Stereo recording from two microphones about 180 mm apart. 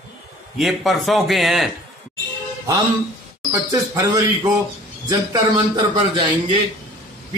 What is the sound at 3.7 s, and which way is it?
Speech, 15° right (ahead or behind).